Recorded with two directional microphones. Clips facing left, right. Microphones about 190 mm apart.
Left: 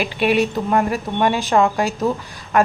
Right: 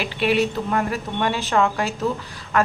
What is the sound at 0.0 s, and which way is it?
A woman's voice, 15° left (ahead or behind).